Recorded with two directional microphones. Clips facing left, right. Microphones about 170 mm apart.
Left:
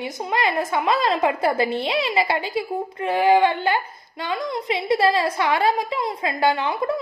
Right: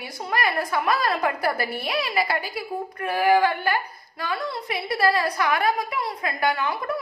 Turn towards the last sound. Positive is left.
turn(degrees=25)  # may be behind; listen again after turning